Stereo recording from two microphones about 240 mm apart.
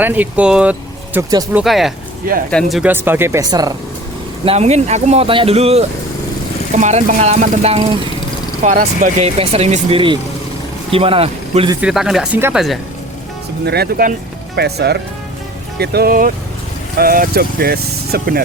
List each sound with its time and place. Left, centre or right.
0.0 s speech: centre
1.6 s speech: centre
4.4 s speech: right
11.8 s speech: centre
13.7 s speech: right